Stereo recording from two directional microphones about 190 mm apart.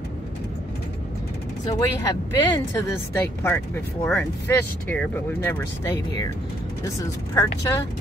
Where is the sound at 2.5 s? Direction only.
15° left (ahead or behind).